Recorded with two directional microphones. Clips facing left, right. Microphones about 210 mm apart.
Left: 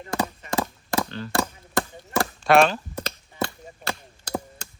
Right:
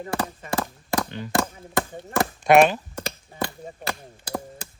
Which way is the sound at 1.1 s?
15° right (ahead or behind).